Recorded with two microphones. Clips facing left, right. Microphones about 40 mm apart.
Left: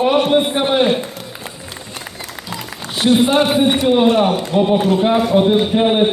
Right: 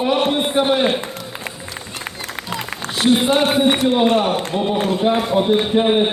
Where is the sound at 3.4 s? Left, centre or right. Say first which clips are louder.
Left 1 dB; right.